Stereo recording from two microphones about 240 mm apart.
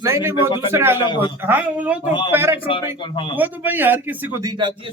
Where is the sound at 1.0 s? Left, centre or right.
Centre.